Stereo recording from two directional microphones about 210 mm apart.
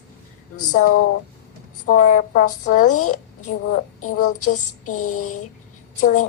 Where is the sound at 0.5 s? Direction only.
90° left.